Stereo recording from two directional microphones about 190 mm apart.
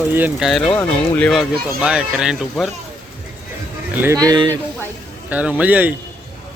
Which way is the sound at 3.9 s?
10° right (ahead or behind).